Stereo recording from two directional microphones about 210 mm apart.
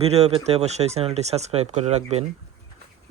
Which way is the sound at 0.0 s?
30° right (ahead or behind).